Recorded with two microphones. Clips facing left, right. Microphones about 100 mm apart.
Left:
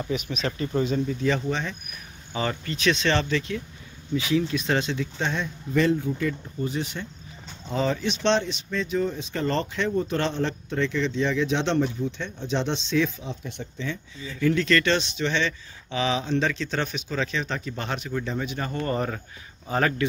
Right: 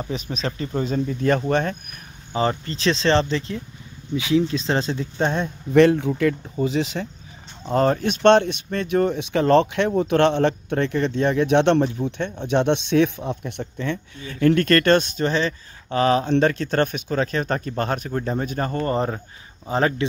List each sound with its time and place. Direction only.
0.0 s speech: 35° right (ahead or behind); by 1.8 s 55° right (ahead or behind)
2.3 s speech: 35° right (ahead or behind)
4.1 s speech: 20° right (ahead or behind); by 7.1 s 90° right
7.6 s speech: 50° right (ahead or behind); by 20.1 s 25° right (ahead or behind)